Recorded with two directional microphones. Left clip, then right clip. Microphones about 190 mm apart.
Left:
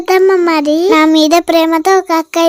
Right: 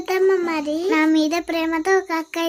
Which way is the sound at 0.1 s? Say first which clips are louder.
Left 10 dB; 45° left (ahead or behind).